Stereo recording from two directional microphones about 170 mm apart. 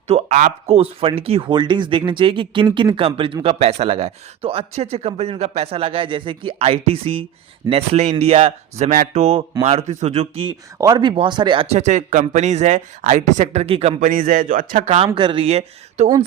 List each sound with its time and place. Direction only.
0.1 s speech: 45° right (ahead or behind)
10.8 s speech: 20° right (ahead or behind)
14.0 s speech: 55° right (ahead or behind); by 16.0 s 40° right (ahead or behind)